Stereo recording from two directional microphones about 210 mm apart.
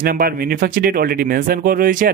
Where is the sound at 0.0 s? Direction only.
45° right (ahead or behind).